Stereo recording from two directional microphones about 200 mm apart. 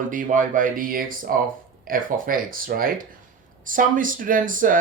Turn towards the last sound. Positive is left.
turn(degrees=-40)  # may be behind; listen again after turning